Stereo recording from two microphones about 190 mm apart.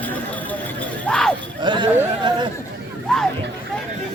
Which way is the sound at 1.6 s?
25° right (ahead or behind).